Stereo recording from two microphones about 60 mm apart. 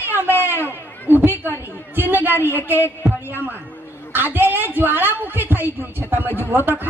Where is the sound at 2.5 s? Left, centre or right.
Right.